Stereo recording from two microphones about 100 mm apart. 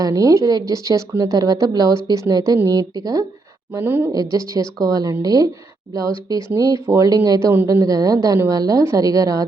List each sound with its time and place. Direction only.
0.0 s a woman's voice: 35° right (ahead or behind)
3.8 s speech: 20° right (ahead or behind)
4.1 s a woman's voice: 35° right (ahead or behind)